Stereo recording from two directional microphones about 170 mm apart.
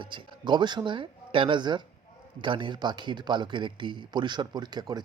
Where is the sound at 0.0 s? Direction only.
30° right (ahead or behind).